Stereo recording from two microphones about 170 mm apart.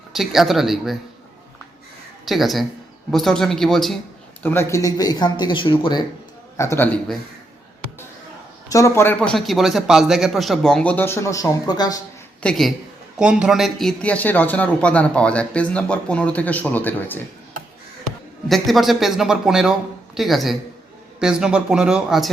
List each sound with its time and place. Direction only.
0.1 s a man's voice: centre (ahead or behind)
2.2 s a man's voice: centre (ahead or behind)
4.4 s speech: 15° left (ahead or behind)
6.6 s a man's voice: 15° left (ahead or behind)
8.7 s a man's voice: 15° left (ahead or behind)
12.4 s a man's voice: 5° left (ahead or behind)
18.4 s a man's voice: centre (ahead or behind)